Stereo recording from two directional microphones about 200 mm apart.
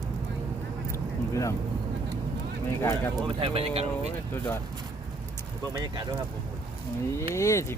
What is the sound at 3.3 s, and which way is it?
Speech, 30° right (ahead or behind).